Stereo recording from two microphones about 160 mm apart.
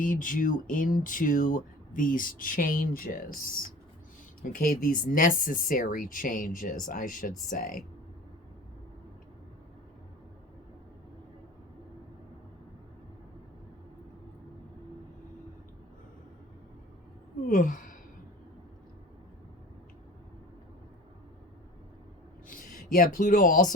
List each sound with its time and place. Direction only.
0.0 s speech: 55° left (ahead or behind)
17.4 s sigh: 55° left (ahead or behind)
22.4 s speech: 55° left (ahead or behind)